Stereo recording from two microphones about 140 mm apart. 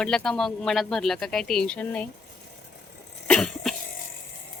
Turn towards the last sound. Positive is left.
turn(degrees=5)  # may be behind; listen again after turning